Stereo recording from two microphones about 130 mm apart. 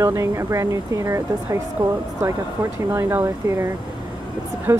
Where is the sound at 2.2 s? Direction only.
20° right (ahead or behind).